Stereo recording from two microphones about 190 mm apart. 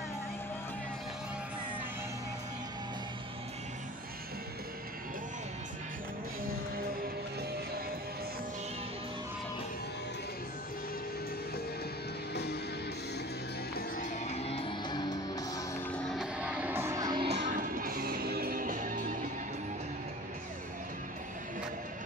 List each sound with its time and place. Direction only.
13.7 s music: 45° left (ahead or behind); by 15.8 s 20° left (ahead or behind)
15.9 s music: 5° left (ahead or behind); by 17.4 s 25° right (ahead or behind)
17.5 s music: 45° right (ahead or behind)